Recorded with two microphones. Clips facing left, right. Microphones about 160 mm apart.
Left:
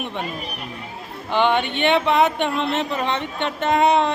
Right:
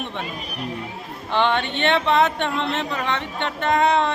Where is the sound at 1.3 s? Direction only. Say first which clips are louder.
Left 2 dB; 10° left (ahead or behind).